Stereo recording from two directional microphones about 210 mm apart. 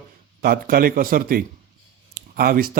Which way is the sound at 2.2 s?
45° right (ahead or behind).